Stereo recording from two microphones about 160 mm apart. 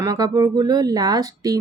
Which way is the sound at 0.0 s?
20° right (ahead or behind).